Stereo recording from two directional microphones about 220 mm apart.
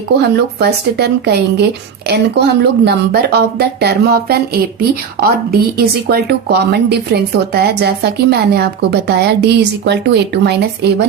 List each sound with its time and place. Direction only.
0.2 s speech: 50° right (ahead or behind)